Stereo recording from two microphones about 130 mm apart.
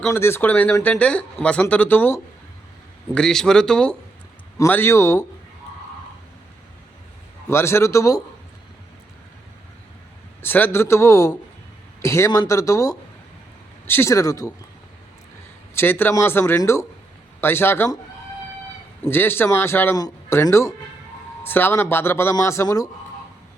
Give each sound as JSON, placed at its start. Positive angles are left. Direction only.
{"t": 0.1, "sound": "speech", "side_deg": 20}
{"t": 3.2, "sound": "speech", "side_deg": 5}
{"t": 4.5, "sound": "speech", "side_deg": 20}
{"t": 7.4, "sound": "speech", "side_deg": 20}
{"t": 10.4, "sound": "speech", "side_deg": 15}
{"t": 15.7, "sound": "speech", "side_deg": 15}
{"t": 19.0, "sound": "speech", "side_deg": 15}